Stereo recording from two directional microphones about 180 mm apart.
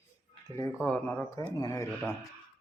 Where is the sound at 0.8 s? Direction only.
10° left (ahead or behind).